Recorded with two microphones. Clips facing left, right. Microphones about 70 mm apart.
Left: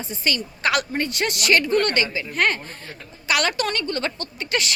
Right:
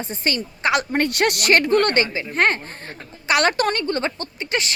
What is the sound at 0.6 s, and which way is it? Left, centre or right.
Speech, right.